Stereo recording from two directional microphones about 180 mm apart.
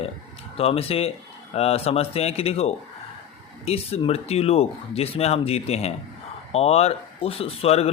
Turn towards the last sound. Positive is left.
turn(degrees=35)  # may be behind; listen again after turning